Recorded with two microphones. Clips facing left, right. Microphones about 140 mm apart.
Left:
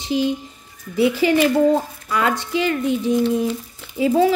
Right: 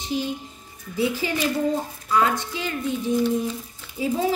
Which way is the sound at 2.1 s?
85° left.